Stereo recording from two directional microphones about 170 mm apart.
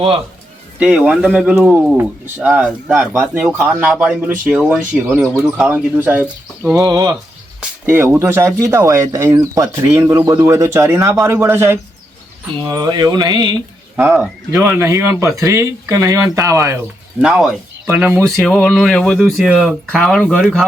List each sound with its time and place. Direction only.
0.8 s speech: 5° right (ahead or behind)
5.2 s speech: 5° left (ahead or behind)
5.6 s speech: 10° right (ahead or behind)
6.7 s mantra: 20° right (ahead or behind)
7.9 s speech: 15° right (ahead or behind)
12.6 s mantra: 20° right (ahead or behind)
13.9 s speech: 10° right (ahead or behind)
17.2 s speech: 5° right (ahead or behind)
18.3 s speech: centre (ahead or behind)